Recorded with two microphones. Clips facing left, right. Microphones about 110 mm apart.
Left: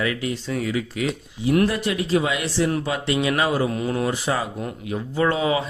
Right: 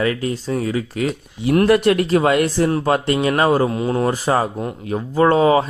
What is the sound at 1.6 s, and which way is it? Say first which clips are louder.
Speech: right 8 dB; 65° right (ahead or behind).